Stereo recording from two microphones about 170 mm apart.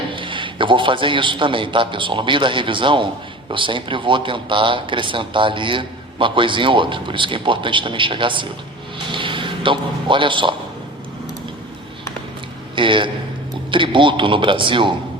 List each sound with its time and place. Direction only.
0.1 s a man's voice: 30° right (ahead or behind)
12.7 s speech: 30° right (ahead or behind)